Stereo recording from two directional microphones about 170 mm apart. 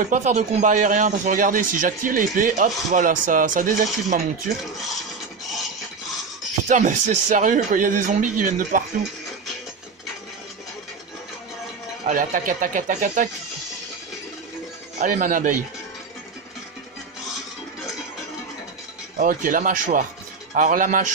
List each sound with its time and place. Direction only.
0.0 s a man's voice: 45° right (ahead or behind)
6.7 s a man's voice: 45° right (ahead or behind)
12.1 s a man's voice: 50° right (ahead or behind)
15.0 s a man's voice: 50° right (ahead or behind)
19.1 s a man's voice: 50° right (ahead or behind)